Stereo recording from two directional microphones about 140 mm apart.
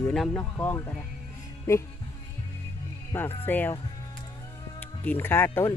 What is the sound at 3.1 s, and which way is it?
Speech, 15° left (ahead or behind).